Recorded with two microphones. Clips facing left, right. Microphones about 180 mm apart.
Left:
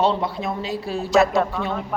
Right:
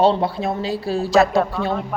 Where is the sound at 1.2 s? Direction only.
Centre (ahead or behind).